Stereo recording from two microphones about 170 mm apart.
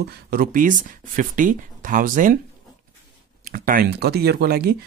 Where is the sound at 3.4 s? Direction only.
55° right (ahead or behind).